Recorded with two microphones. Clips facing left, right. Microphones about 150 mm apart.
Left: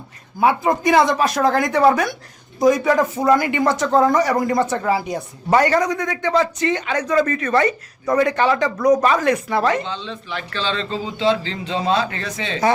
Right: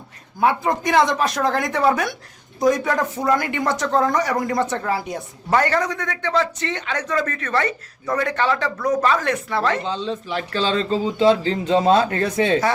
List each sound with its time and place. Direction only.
0.3 s speech: 5° left (ahead or behind)
5.5 s a man's voice: 10° left (ahead or behind)
9.8 s a man's voice: 40° right (ahead or behind)